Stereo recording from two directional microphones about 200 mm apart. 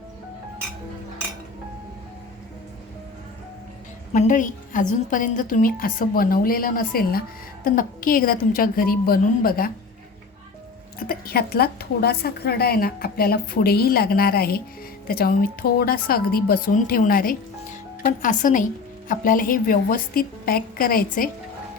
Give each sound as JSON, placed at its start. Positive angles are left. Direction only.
{"t": 4.1, "sound": "a woman's voice", "side_deg": 40}
{"t": 11.0, "sound": "a woman's voice", "side_deg": 50}